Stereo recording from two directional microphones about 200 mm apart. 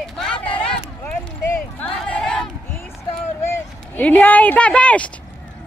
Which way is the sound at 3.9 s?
10° left (ahead or behind).